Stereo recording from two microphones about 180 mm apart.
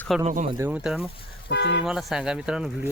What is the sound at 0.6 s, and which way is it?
Speech, 10° right (ahead or behind).